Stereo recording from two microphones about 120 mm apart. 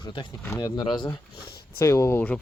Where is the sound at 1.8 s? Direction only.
25° left (ahead or behind).